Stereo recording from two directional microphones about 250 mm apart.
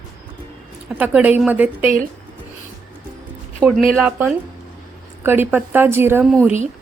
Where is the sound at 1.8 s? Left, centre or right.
Right.